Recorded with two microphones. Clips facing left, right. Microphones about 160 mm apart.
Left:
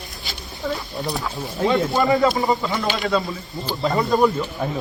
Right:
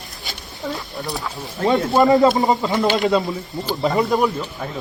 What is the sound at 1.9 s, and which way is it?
Speech, 25° right (ahead or behind).